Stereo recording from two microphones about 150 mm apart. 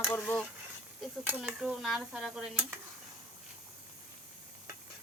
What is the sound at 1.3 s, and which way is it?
Cutlery, 5° right (ahead or behind).